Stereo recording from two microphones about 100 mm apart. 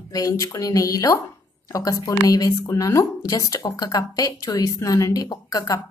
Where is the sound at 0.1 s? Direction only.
35° left (ahead or behind).